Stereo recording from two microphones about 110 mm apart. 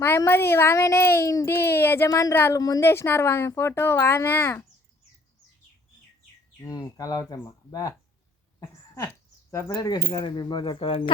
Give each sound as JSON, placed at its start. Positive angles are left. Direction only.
{"t": 0.3, "sound": "speech", "side_deg": 20}
{"t": 2.0, "sound": "speech", "side_deg": 35}
{"t": 2.3, "sound": "speech", "side_deg": 20}
{"t": 2.6, "sound": "speech", "side_deg": 35}
{"t": 2.8, "sound": "speech", "side_deg": 20}
{"t": 6.6, "sound": "speech", "side_deg": 35}
{"t": 9.5, "sound": "speech", "side_deg": 25}